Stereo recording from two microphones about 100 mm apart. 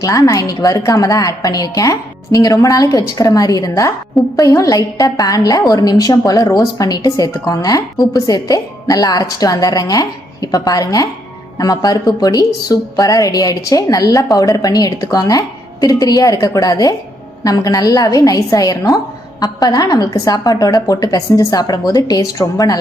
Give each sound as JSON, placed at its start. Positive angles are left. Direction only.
{"t": 0.0, "sound": "a woman's voice", "side_deg": 35}